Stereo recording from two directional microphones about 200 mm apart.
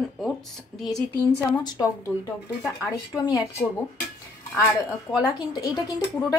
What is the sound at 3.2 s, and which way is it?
Speech, 20° left (ahead or behind).